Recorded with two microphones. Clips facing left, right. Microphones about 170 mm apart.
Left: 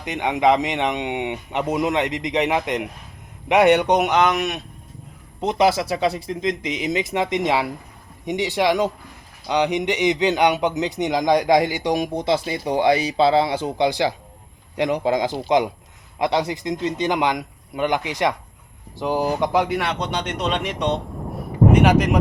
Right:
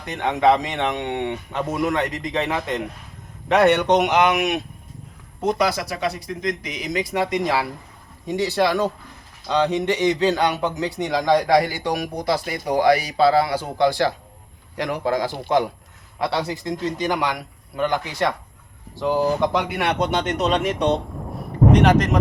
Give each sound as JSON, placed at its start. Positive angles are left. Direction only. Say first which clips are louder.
{"t": 0.0, "sound": "speech", "louder": "even", "side_deg": 15}
{"t": 4.1, "sound": "speech", "louder": "right 1 dB", "side_deg": -10}
{"t": 5.4, "sound": "a man's voice", "louder": "left 2 dB", "side_deg": 20}
{"t": 19.5, "sound": "speech", "louder": "left 4 dB", "side_deg": 0}
{"t": 21.7, "sound": "speech", "louder": "even", "side_deg": 10}